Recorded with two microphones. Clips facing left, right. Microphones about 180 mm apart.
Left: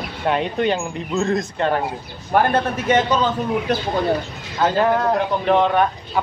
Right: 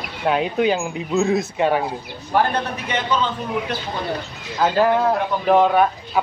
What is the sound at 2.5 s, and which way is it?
Speech, 45° left (ahead or behind).